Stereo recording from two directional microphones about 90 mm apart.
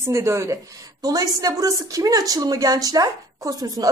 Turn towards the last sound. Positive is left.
turn(degrees=-45)  # may be behind; listen again after turning